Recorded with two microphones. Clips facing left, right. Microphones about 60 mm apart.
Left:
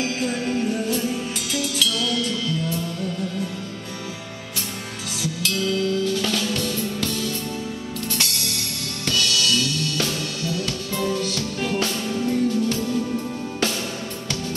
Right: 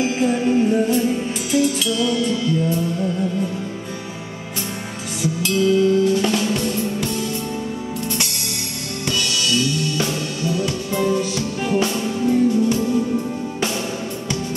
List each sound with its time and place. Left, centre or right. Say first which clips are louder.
0.0 s music: right 6 dB; centre
5.4 s music: right 7 dB; right
9.0 s music: even; right